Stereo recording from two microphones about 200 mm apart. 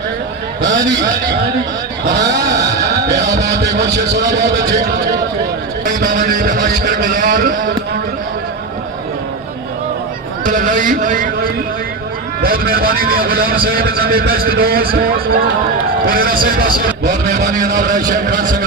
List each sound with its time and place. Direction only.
0.6 s speech: 65° right (ahead or behind)
2.0 s speech: 60° right (ahead or behind)
5.8 s a man's voice: 40° right (ahead or behind)
10.4 s a man's voice: 40° right (ahead or behind)